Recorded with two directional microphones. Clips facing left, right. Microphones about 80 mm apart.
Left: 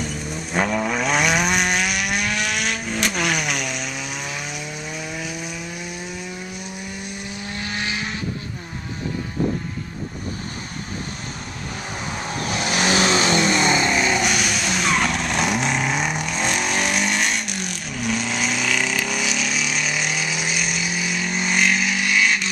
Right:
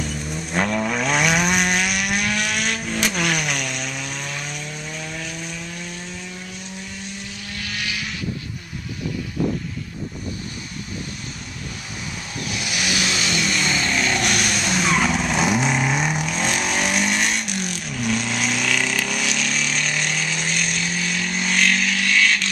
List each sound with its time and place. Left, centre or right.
0.0 s vehicle: centre
7.2 s vehicle: left
12.2 s vehicle: left
13.7 s vehicle: centre